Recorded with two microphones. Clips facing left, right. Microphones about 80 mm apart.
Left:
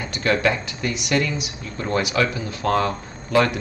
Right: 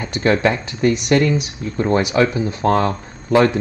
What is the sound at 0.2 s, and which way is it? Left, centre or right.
Speech, right.